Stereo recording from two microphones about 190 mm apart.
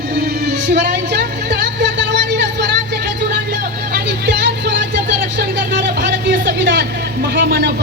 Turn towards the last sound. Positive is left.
turn(degrees=-60)  # may be behind; listen again after turning